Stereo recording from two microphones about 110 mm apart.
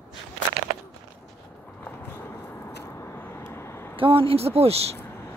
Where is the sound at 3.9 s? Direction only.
55° right (ahead or behind).